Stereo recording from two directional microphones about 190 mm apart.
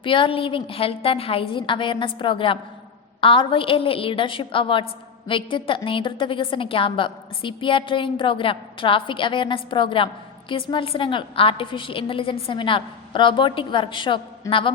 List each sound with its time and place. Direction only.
0.0 s a woman's voice: 25° left (ahead or behind)